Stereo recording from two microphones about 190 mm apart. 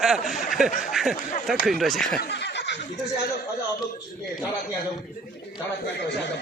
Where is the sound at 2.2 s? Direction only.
60° left (ahead or behind).